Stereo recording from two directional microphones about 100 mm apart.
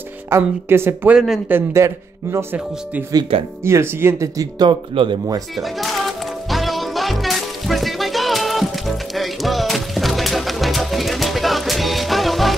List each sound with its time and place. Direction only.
0.3 s speech: 30° right (ahead or behind)
2.5 s speech: 15° right (ahead or behind)
3.3 s speech: 75° right (ahead or behind)
3.6 s speech: 25° right (ahead or behind)
4.4 s speech: 45° right (ahead or behind)
4.9 s speech: 55° right (ahead or behind)
5.6 s music: centre (ahead or behind)